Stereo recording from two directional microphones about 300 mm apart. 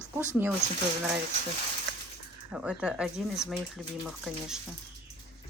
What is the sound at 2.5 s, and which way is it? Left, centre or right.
Speech, centre.